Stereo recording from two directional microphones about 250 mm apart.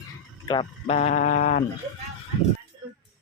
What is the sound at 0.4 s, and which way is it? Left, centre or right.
A man's voice, centre.